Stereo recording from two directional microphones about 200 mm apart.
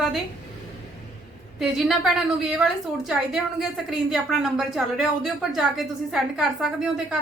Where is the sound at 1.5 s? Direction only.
Centre (ahead or behind).